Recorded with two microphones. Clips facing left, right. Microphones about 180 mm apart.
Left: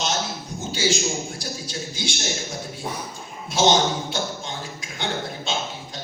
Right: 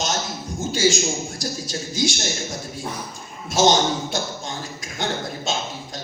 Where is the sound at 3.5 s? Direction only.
45° right (ahead or behind).